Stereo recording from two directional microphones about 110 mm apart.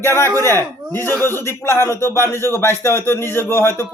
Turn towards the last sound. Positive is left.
turn(degrees=20)  # may be behind; listen again after turning